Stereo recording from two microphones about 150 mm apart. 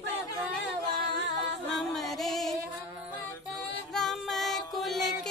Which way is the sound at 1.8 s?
Centre (ahead or behind).